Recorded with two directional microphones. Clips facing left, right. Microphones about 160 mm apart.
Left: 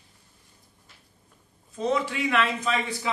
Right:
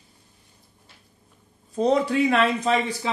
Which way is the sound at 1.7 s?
35° right (ahead or behind).